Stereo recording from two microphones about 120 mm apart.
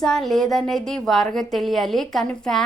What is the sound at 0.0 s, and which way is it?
A woman's voice, 5° left (ahead or behind).